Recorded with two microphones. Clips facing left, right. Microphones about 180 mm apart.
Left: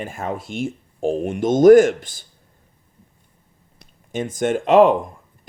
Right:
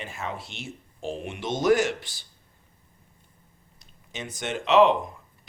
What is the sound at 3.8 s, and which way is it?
Speech, 50° left (ahead or behind).